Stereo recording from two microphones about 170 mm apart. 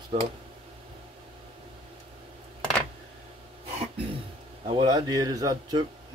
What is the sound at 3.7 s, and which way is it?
Throat clearing, 35° right (ahead or behind).